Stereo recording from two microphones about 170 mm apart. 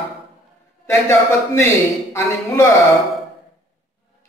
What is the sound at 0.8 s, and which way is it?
A man's voice, 15° left (ahead or behind).